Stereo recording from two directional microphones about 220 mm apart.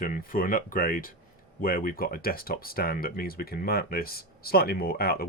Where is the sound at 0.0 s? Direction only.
40° left (ahead or behind).